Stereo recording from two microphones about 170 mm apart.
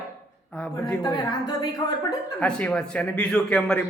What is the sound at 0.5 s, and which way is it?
Speech, 5° left (ahead or behind).